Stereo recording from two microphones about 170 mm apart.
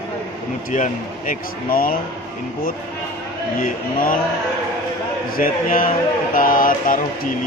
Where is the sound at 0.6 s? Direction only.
50° left (ahead or behind).